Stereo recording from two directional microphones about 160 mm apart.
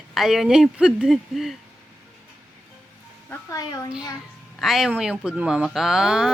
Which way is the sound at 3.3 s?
25° left (ahead or behind).